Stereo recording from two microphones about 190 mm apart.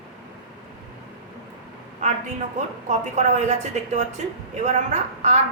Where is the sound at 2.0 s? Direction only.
40° right (ahead or behind).